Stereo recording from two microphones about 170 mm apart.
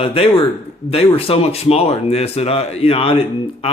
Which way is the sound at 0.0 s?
35° left (ahead or behind).